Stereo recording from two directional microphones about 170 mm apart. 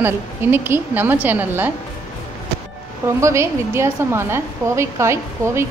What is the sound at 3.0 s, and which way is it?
A woman's voice, 15° right (ahead or behind).